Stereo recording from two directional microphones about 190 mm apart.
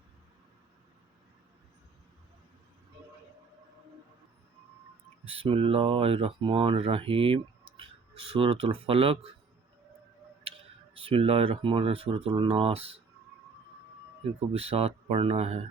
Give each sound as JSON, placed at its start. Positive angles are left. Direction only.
{"t": 5.3, "sound": "speech", "side_deg": -30}
{"t": 10.9, "sound": "speech", "side_deg": -30}
{"t": 14.5, "sound": "speech", "side_deg": -30}